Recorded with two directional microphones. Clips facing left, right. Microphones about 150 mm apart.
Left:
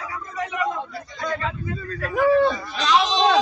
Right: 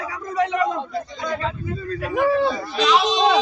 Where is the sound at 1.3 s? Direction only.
30° right (ahead or behind).